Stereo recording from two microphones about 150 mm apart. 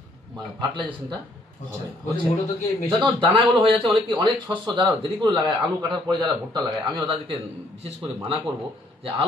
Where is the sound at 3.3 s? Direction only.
35° right (ahead or behind).